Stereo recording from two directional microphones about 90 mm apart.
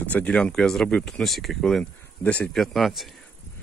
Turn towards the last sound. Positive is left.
turn(degrees=0)  # may be behind; listen again after turning